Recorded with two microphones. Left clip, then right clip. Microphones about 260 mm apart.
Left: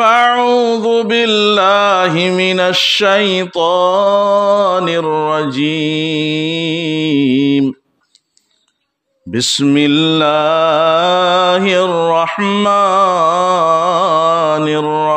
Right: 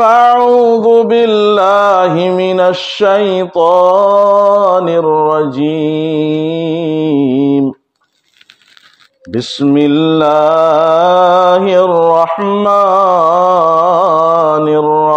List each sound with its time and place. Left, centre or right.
0.0 s mantra: left
9.3 s mantra: left